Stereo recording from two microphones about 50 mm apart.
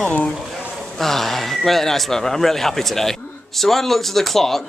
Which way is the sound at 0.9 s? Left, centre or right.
Centre.